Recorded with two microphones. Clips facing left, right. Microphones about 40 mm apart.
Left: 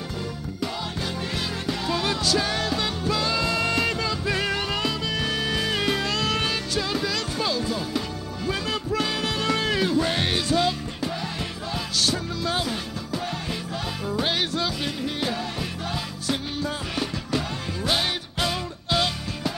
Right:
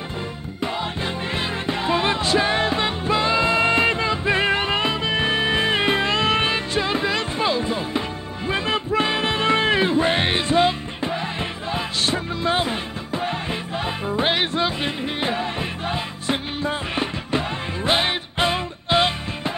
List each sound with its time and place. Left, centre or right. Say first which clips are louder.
1.7 s music: right 5 dB; right